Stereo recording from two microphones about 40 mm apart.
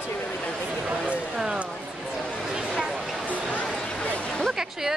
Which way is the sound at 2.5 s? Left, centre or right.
Centre.